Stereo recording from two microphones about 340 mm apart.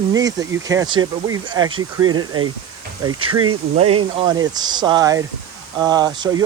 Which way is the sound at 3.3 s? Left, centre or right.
Right.